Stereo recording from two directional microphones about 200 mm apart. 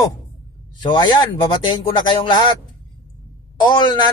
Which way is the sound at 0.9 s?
20° left (ahead or behind).